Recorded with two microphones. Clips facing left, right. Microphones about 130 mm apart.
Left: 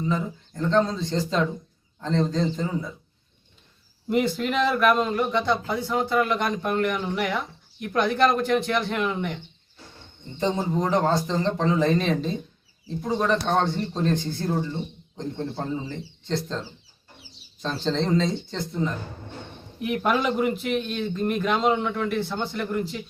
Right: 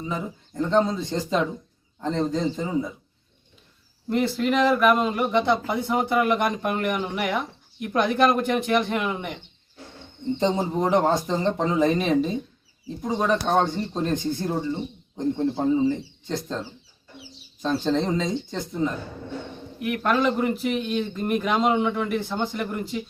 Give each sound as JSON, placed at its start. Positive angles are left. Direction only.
{"t": 0.0, "sound": "speech", "side_deg": -10}
{"t": 4.1, "sound": "a man's voice", "side_deg": 0}
{"t": 5.3, "sound": "speech", "side_deg": -20}
{"t": 6.7, "sound": "a man's voice", "side_deg": -5}
{"t": 10.4, "sound": "speech", "side_deg": -15}
{"t": 13.0, "sound": "a man's voice", "side_deg": -5}
{"t": 17.6, "sound": "speech", "side_deg": -10}
{"t": 20.0, "sound": "a man's voice", "side_deg": 10}
{"t": 20.6, "sound": "a man's voice", "side_deg": -5}